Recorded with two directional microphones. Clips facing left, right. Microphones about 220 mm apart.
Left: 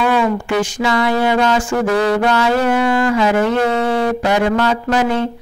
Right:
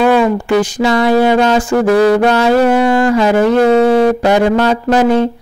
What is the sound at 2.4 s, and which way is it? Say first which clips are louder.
Music: right 5 dB; 35° right (ahead or behind).